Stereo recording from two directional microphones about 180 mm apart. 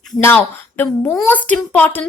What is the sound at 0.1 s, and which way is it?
A woman's voice, 10° left (ahead or behind).